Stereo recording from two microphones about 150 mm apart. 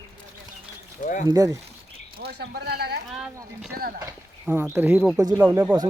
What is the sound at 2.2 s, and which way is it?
Speech, 90° right.